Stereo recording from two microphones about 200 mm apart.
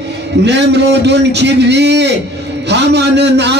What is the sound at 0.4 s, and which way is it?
Speech, 60° right (ahead or behind).